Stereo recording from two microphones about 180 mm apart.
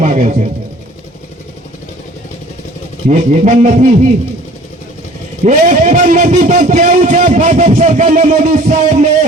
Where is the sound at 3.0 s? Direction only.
40° right (ahead or behind).